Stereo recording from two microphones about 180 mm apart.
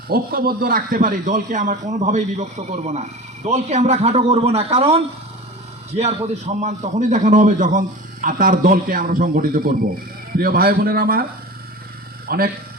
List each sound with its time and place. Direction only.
0.1 s a man's voice: 55° right (ahead or behind)
12.3 s a man's voice: 60° right (ahead or behind)